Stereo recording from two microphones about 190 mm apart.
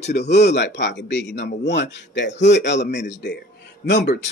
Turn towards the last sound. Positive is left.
turn(degrees=65)  # may be behind; listen again after turning